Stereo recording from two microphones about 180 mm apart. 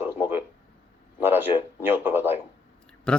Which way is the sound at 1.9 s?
10° right (ahead or behind).